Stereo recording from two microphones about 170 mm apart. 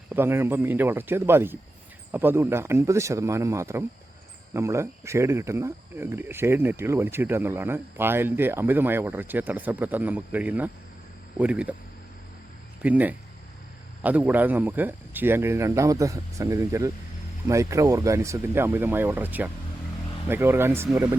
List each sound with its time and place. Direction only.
0.1 s speech: 15° right (ahead or behind)
12.8 s speech: 10° right (ahead or behind)